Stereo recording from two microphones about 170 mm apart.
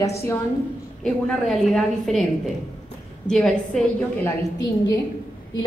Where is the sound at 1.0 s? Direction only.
Centre (ahead or behind).